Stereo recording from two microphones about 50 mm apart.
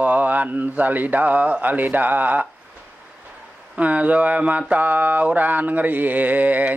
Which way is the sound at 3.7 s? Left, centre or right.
Right.